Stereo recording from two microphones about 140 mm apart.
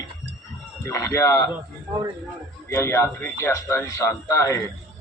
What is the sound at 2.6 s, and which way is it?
Speech, 15° left (ahead or behind).